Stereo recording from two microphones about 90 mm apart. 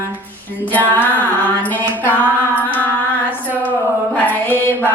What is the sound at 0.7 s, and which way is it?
Music, 20° left (ahead or behind).